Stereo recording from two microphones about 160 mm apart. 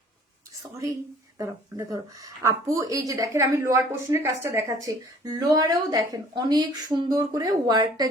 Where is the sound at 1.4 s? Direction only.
20° right (ahead or behind).